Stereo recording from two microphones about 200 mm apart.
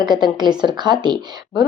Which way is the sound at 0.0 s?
20° right (ahead or behind).